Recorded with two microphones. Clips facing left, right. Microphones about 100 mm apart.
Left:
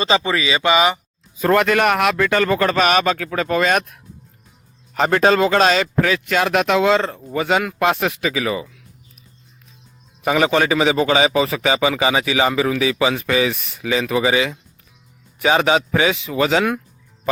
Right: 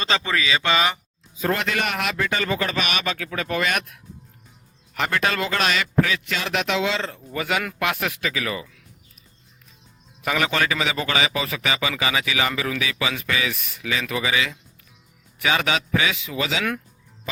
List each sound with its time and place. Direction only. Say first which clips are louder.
0.0 s speech: left 5 dB; 10° left (ahead or behind)
1.4 s a man's voice: left 8 dB; 55° left (ahead or behind); by 8.7 s 25° left (ahead or behind)
10.2 s a man's voice: left 6 dB; 25° left (ahead or behind)
16.4 s speech: left 9 dB; 45° left (ahead or behind)